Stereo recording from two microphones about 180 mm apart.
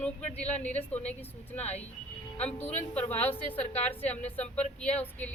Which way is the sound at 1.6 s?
35° left (ahead or behind).